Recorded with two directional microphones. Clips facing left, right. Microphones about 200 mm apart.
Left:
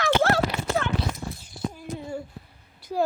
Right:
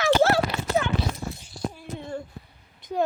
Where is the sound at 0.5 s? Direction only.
15° left (ahead or behind).